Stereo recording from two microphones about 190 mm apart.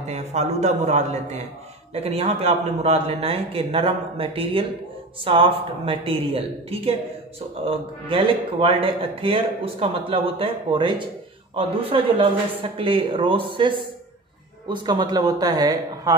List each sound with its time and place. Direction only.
0.0 s a man's voice: 35° right (ahead or behind); by 16.2 s 20° right (ahead or behind)